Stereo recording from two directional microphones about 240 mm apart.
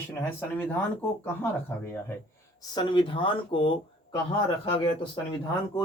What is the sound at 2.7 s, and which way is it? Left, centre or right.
Speech, centre.